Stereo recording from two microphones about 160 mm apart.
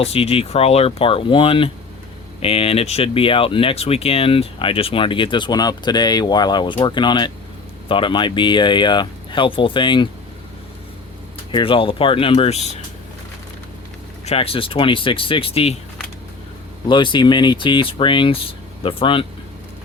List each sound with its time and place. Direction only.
0.0 s speech: 40° left (ahead or behind)
11.5 s speech: 30° left (ahead or behind)
14.3 s speech: 35° left (ahead or behind)
16.9 s speech: 30° left (ahead or behind)